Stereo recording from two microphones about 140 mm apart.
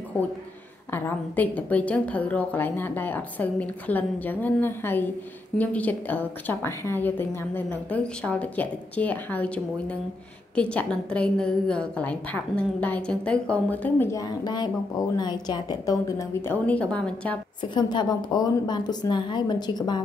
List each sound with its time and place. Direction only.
0.9 s a woman's voice: 15° left (ahead or behind)
17.6 s a woman's voice: 30° left (ahead or behind)